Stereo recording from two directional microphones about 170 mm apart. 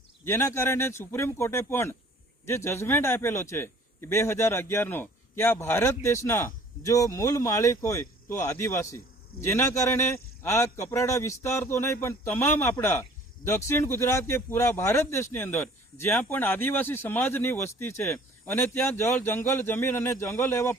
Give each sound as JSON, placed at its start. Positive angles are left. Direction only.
{"t": 0.3, "sound": "a man's voice", "side_deg": 15}